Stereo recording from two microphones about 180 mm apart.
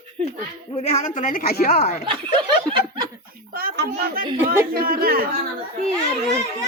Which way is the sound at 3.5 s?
55° right (ahead or behind).